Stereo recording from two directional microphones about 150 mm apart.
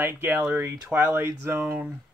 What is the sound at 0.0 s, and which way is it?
Speech, 15° right (ahead or behind).